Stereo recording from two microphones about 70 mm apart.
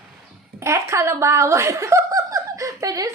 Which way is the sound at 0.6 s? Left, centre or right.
Right.